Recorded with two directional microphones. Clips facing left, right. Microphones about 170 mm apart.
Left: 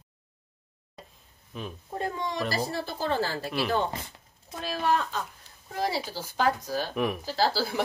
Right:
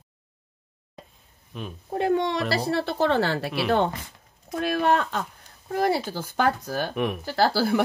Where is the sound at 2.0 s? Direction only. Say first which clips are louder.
Right 8 dB; 70° right (ahead or behind).